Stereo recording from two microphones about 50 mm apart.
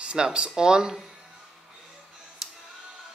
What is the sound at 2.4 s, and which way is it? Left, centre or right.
Music, centre.